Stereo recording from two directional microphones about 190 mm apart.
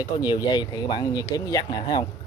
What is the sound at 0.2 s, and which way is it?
Speech, 20° left (ahead or behind).